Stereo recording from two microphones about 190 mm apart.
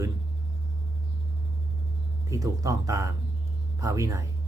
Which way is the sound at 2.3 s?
15° right (ahead or behind).